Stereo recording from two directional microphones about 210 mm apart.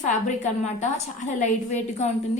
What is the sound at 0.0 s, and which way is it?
A woman's voice, 35° left (ahead or behind).